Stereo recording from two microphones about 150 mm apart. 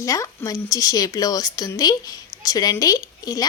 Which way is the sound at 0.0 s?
20° left (ahead or behind).